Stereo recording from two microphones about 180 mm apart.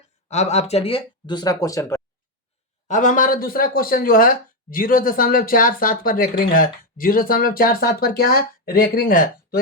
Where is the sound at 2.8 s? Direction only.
45° left (ahead or behind).